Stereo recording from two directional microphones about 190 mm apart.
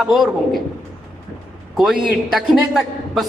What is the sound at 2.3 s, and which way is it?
Speech, centre (ahead or behind).